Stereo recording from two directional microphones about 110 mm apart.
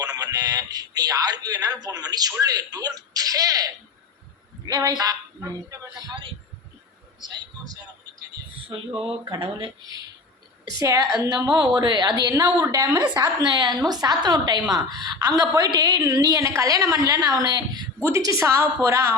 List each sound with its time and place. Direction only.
0.0 s a man's voice: 35° right (ahead or behind)
7.2 s a sound: 35° right (ahead or behind)
9.3 s speech: 50° right (ahead or behind)
10.8 s a man's voice: 30° right (ahead or behind)